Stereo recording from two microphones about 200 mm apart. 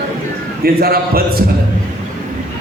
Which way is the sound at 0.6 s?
50° right (ahead or behind).